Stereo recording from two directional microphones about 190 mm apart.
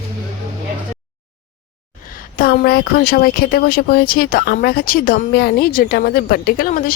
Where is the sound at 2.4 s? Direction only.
50° left (ahead or behind).